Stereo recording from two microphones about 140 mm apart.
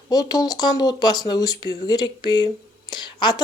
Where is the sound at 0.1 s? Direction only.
25° left (ahead or behind).